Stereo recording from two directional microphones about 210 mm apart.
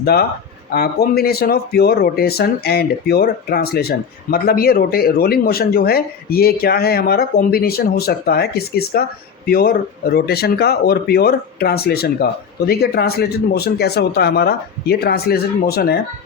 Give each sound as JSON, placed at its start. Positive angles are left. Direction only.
{"t": 0.0, "sound": "speech", "side_deg": 50}